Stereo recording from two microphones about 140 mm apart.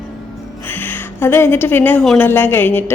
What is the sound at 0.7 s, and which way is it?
A woman's voice, 15° left (ahead or behind).